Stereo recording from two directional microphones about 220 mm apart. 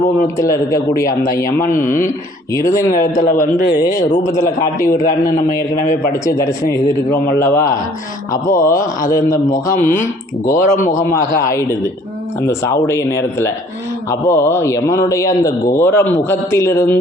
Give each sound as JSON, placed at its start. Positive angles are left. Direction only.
{"t": 0.3, "sound": "a man's voice", "side_deg": 15}
{"t": 3.2, "sound": "a man's voice", "side_deg": 40}
{"t": 6.2, "sound": "a man's voice", "side_deg": 15}
{"t": 12.4, "sound": "a man's voice", "side_deg": 15}